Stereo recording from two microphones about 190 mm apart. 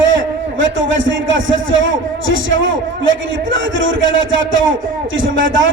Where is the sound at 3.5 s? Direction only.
85° right.